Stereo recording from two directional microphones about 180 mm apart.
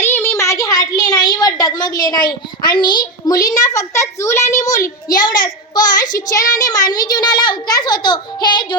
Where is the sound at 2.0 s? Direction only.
20° left (ahead or behind).